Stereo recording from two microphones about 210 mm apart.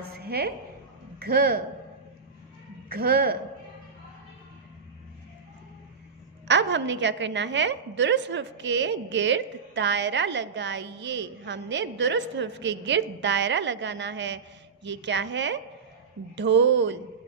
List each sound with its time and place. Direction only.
0.1 s a sound: 45° right (ahead or behind)
1.2 s speech: 45° right (ahead or behind)
2.9 s speech: 45° right (ahead or behind)
6.4 s a woman's voice: 60° right (ahead or behind)